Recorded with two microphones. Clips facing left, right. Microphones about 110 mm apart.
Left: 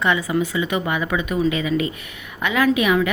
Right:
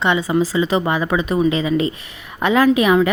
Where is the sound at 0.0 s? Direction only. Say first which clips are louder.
Right 3 dB; 25° right (ahead or behind).